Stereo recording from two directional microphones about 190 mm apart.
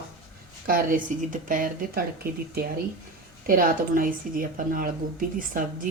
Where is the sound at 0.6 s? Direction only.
45° right (ahead or behind).